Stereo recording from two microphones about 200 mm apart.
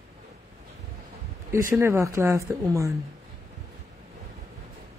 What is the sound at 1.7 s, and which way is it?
Speech, 15° right (ahead or behind).